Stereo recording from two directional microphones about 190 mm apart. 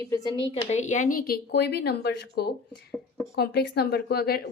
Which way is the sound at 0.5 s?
35° left (ahead or behind).